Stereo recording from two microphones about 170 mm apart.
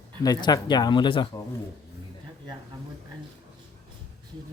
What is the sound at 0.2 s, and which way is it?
Speech, 20° left (ahead or behind).